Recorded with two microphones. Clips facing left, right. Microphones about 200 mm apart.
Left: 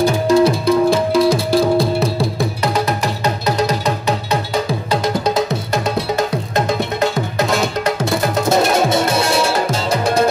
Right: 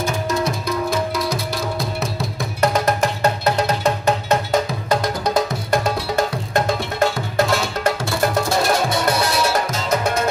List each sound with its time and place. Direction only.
0.0 s music: 30° left (ahead or behind)
3.4 s music: 40° left (ahead or behind)
8.1 s music: 20° left (ahead or behind)